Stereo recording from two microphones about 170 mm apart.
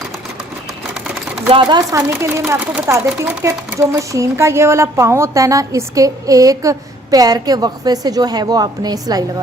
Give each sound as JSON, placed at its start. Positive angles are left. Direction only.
{"t": 1.5, "sound": "speech", "side_deg": -25}